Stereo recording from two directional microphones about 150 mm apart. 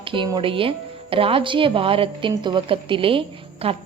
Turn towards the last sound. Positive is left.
turn(degrees=-40)  # may be behind; listen again after turning